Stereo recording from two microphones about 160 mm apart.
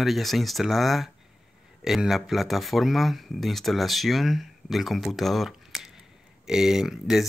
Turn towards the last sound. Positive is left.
turn(degrees=0)  # may be behind; listen again after turning